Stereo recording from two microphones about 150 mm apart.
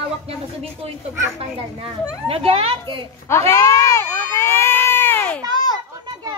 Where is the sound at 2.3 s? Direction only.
40° right (ahead or behind).